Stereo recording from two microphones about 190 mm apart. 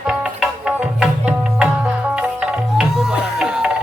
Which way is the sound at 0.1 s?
5° right (ahead or behind).